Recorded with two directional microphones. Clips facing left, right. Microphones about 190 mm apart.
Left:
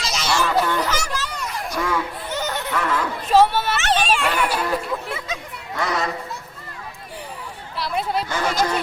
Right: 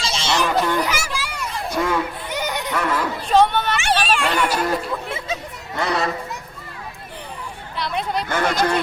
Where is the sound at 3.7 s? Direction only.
10° right (ahead or behind).